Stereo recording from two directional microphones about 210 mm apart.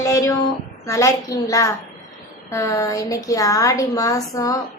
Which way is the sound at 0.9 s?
15° left (ahead or behind).